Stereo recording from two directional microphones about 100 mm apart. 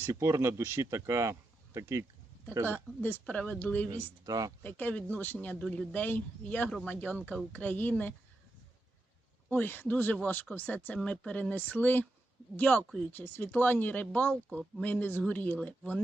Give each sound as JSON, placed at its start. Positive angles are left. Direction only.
{"t": 0.1, "sound": "speech", "side_deg": -30}
{"t": 2.6, "sound": "speech", "side_deg": 20}
{"t": 4.3, "sound": "speech", "side_deg": -40}
{"t": 4.6, "sound": "speech", "side_deg": 15}
{"t": 9.5, "sound": "speech", "side_deg": 20}